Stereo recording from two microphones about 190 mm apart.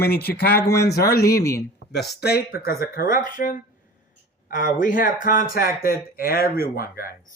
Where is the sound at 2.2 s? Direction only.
55° left (ahead or behind).